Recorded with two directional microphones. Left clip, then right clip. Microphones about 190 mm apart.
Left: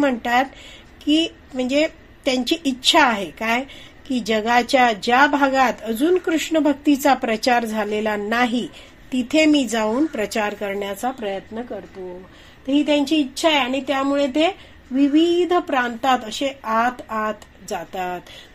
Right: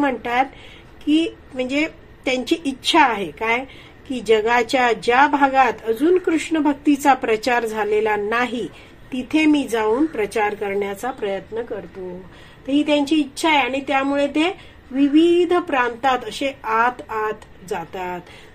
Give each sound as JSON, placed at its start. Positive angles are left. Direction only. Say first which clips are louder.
{"t": 0.0, "sound": "a woman's voice", "louder": "left 1 dB", "side_deg": 45}
{"t": 12.6, "sound": "speech", "louder": "even", "side_deg": 35}